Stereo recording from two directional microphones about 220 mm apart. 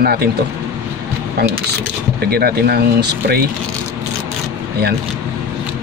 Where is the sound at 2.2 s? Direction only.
45° right (ahead or behind).